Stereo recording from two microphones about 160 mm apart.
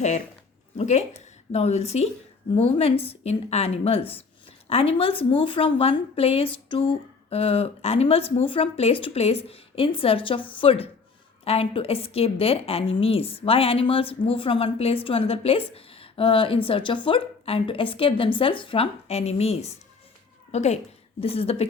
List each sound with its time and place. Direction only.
0.8 s a woman's voice: 45° left (ahead or behind)